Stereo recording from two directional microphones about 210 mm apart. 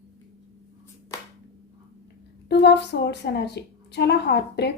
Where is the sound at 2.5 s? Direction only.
55° left (ahead or behind).